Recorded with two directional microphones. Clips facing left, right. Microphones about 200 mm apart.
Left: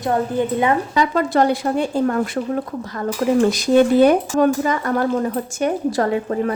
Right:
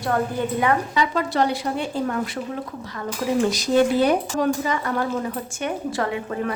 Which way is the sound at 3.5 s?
55° left (ahead or behind).